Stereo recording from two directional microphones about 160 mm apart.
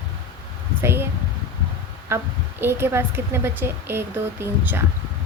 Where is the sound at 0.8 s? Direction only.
15° right (ahead or behind).